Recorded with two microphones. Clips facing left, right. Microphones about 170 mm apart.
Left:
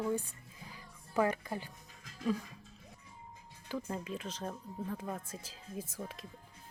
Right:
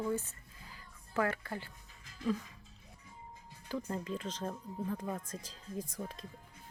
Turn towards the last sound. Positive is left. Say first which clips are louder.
# right 1 dB
turn(degrees=5)  # may be behind; listen again after turning